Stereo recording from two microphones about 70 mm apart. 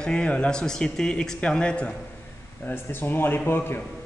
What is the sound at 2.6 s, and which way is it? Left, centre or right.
Speech, left.